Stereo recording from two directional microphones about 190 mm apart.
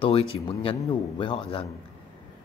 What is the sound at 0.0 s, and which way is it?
A man's voice, 30° left (ahead or behind).